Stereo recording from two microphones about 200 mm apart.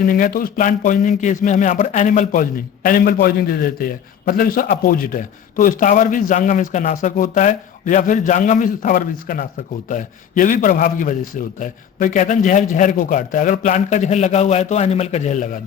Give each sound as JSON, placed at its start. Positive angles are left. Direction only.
{"t": 0.0, "sound": "a man's voice", "side_deg": 45}